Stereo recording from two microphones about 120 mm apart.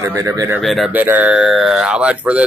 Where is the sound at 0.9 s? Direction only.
15° right (ahead or behind).